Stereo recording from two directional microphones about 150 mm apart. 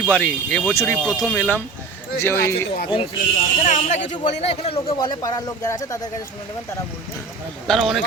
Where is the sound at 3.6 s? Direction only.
55° left (ahead or behind).